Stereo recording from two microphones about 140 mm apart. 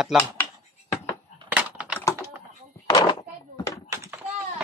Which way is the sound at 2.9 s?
25° left (ahead or behind).